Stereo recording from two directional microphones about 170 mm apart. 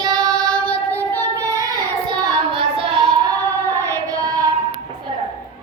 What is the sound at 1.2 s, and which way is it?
Child singing, 20° right (ahead or behind).